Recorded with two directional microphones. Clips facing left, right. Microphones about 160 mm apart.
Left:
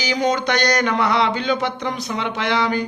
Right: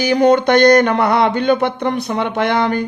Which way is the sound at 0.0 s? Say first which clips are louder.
Right 8 dB; 55° right (ahead or behind).